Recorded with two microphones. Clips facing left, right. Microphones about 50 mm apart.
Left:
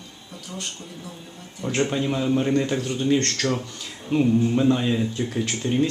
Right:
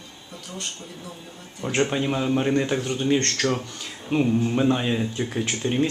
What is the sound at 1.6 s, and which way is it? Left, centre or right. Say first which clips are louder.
Speech: even; centre.